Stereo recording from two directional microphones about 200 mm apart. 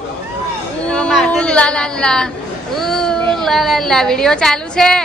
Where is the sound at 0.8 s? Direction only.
5° left (ahead or behind).